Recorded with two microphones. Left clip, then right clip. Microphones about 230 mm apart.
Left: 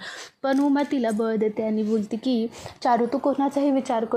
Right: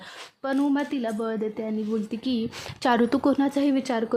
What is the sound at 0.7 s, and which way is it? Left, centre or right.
Speech, centre.